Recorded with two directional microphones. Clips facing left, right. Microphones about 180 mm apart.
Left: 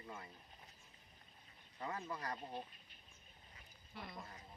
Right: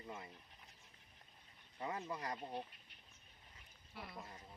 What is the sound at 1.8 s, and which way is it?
Speech, 20° right (ahead or behind).